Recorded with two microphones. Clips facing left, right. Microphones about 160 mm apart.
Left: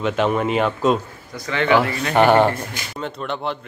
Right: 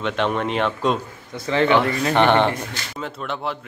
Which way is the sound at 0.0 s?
5° left (ahead or behind).